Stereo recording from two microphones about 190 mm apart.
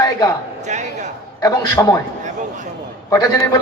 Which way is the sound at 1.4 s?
15° left (ahead or behind).